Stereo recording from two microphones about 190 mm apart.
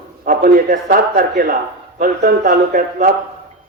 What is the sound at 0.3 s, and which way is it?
A man's voice, 45° right (ahead or behind).